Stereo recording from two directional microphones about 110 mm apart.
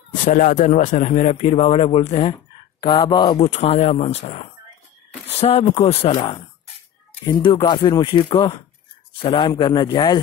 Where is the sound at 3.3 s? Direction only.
70° left (ahead or behind).